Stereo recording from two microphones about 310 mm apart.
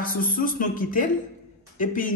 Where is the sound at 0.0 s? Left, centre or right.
Left.